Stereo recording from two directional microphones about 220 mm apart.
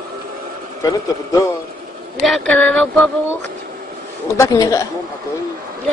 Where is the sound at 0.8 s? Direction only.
15° left (ahead or behind).